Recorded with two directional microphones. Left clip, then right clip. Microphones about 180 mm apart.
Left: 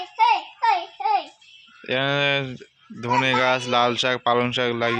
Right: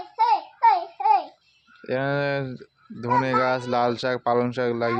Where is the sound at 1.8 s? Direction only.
Centre (ahead or behind).